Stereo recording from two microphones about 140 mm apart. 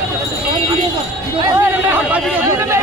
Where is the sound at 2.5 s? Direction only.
20° right (ahead or behind).